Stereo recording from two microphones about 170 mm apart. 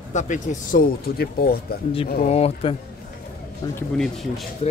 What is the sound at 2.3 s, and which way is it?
Speech, 35° left (ahead or behind).